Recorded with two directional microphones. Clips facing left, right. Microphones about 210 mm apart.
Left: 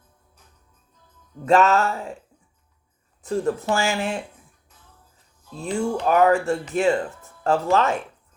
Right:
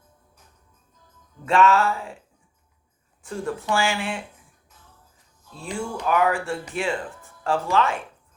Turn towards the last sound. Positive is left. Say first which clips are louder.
# left 3 dB
turn(degrees=40)  # may be behind; listen again after turning